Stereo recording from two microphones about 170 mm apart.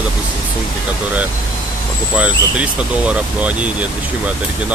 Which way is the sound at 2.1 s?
10° right (ahead or behind).